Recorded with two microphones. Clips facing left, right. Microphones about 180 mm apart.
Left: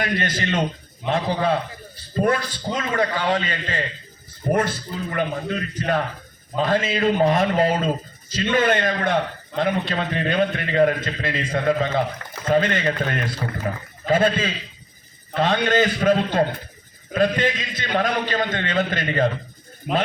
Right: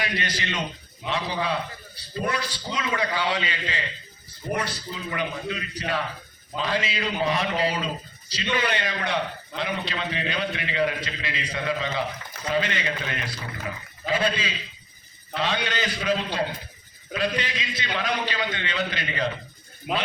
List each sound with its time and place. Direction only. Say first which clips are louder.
0.0 s a man's voice: left 6 dB; 50° left (ahead or behind)